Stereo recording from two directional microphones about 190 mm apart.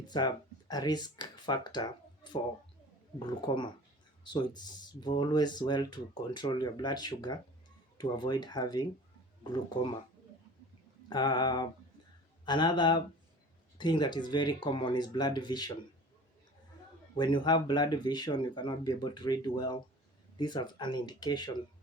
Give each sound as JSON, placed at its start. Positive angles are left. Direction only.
{"t": 0.1, "sound": "speech", "side_deg": 20}
{"t": 11.1, "sound": "speech", "side_deg": 20}
{"t": 17.2, "sound": "speech", "side_deg": 25}